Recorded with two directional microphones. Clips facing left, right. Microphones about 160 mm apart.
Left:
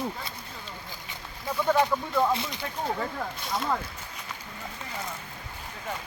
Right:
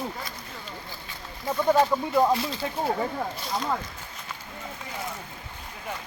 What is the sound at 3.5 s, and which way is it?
Speech, 5° right (ahead or behind).